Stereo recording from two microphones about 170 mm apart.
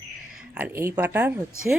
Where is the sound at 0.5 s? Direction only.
15° right (ahead or behind).